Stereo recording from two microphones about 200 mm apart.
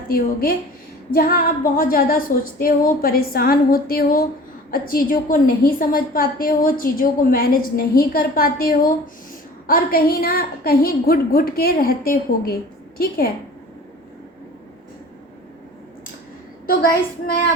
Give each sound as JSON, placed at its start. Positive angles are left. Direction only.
{"t": 0.1, "sound": "a woman's voice", "side_deg": 45}
{"t": 16.6, "sound": "a woman's voice", "side_deg": 50}